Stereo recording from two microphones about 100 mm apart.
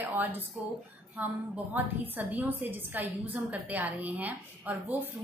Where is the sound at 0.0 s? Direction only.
20° right (ahead or behind).